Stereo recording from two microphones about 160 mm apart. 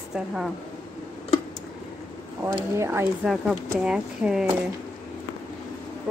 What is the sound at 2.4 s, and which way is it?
Speech, 20° right (ahead or behind).